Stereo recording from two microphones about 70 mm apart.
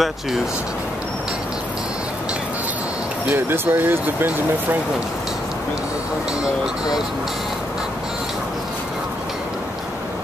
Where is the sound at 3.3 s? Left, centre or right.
Right.